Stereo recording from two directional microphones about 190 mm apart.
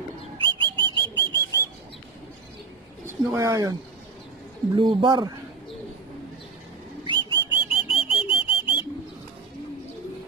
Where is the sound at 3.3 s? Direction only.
15° right (ahead or behind).